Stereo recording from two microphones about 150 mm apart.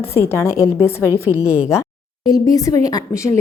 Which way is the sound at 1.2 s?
10° right (ahead or behind).